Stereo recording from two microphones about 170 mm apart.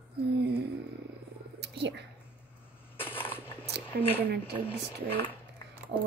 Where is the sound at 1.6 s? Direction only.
90° right.